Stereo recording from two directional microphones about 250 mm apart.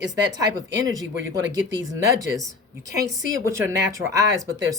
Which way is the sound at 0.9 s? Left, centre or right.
Centre.